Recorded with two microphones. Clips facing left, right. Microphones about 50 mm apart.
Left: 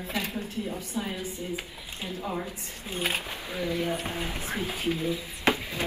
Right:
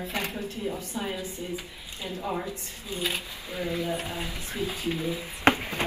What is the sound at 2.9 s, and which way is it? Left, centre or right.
Speech, left.